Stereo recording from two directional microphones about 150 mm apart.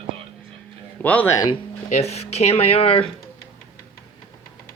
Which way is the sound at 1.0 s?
10° left (ahead or behind).